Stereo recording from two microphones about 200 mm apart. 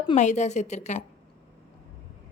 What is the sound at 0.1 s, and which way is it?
Speech, 35° left (ahead or behind).